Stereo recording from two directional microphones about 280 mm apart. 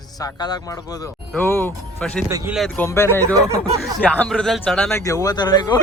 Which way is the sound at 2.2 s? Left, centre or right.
Centre.